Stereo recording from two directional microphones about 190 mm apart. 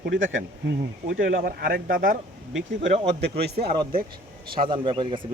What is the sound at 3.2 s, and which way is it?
Speech, 60° right (ahead or behind).